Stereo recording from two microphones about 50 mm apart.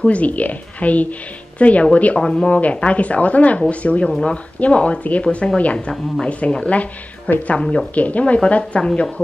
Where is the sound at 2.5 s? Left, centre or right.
Left.